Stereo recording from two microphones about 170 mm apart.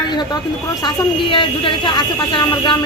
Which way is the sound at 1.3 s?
30° left (ahead or behind).